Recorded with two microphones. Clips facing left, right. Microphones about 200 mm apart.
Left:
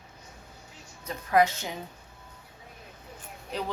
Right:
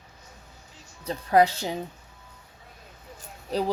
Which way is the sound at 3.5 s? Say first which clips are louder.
Right 7 dB; 35° right (ahead or behind).